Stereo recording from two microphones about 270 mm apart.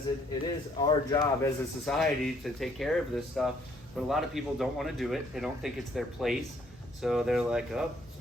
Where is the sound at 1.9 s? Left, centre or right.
Centre.